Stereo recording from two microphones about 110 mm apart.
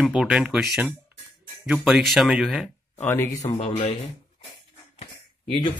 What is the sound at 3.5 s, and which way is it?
Speech, 70° left (ahead or behind).